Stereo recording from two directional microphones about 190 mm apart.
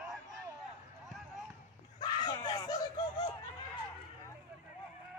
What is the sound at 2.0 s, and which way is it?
Screaming, 20° left (ahead or behind).